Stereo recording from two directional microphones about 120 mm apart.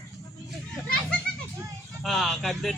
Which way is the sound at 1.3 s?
10° left (ahead or behind).